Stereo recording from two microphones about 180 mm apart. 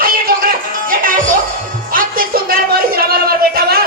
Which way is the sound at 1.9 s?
50° right (ahead or behind).